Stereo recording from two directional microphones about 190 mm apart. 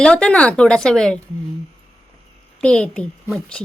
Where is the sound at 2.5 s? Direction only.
5° left (ahead or behind).